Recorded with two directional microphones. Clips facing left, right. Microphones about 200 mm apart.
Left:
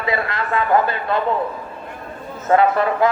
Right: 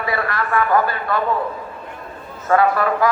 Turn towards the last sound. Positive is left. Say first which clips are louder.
# left 1 dB
turn(degrees=25)  # may be behind; listen again after turning